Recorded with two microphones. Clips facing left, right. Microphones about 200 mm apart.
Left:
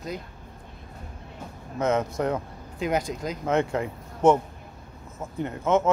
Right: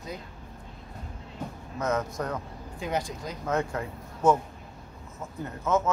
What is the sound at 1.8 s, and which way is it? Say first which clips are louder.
Speech: left 5 dB; 25° left (ahead or behind).